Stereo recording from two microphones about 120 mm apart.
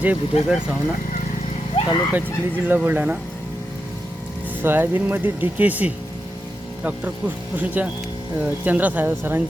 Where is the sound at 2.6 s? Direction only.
15° right (ahead or behind).